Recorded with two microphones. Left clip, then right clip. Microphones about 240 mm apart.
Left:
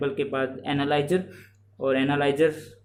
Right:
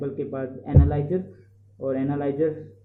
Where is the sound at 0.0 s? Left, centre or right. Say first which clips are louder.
Left 3 dB; left.